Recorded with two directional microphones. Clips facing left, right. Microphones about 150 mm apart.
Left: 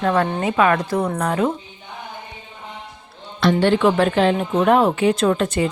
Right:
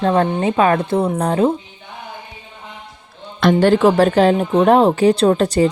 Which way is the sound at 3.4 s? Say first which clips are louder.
Right 4 dB; 40° right (ahead or behind).